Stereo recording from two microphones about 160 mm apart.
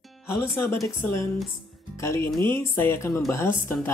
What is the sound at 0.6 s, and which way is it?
Speech, 15° left (ahead or behind).